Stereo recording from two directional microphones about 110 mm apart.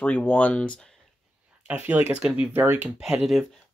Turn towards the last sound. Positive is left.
turn(degrees=0)  # may be behind; listen again after turning